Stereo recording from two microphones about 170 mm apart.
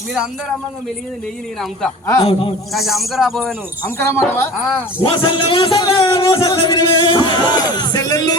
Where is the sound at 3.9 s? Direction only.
15° left (ahead or behind).